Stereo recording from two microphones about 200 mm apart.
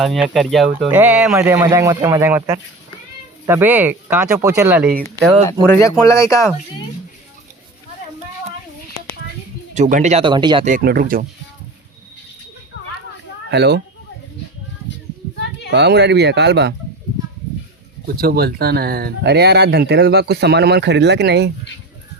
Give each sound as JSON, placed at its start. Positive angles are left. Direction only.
{"t": 0.0, "sound": "speech", "side_deg": 0}
{"t": 5.8, "sound": "speech", "side_deg": 15}
{"t": 9.7, "sound": "speech", "side_deg": -35}
{"t": 10.7, "sound": "speech", "side_deg": -45}
{"t": 13.5, "sound": "speech", "side_deg": -55}
{"t": 15.7, "sound": "speech", "side_deg": -55}
{"t": 18.0, "sound": "speech", "side_deg": -50}